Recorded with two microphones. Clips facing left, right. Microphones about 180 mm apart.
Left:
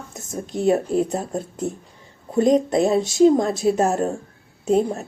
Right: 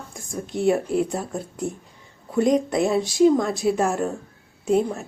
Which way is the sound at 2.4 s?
20° left (ahead or behind).